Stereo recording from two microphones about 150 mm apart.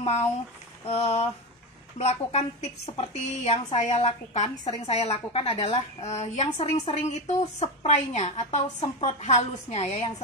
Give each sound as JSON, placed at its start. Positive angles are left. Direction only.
{"t": 0.0, "sound": "a woman's voice", "side_deg": 45}